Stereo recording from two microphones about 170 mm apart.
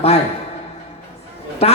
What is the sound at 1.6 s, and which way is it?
Speech, 35° left (ahead or behind).